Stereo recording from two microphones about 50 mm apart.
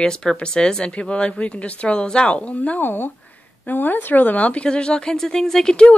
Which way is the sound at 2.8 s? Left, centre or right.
Left.